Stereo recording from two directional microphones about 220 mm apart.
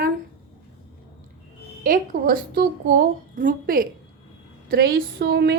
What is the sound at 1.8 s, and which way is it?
A woman's voice, 40° right (ahead or behind).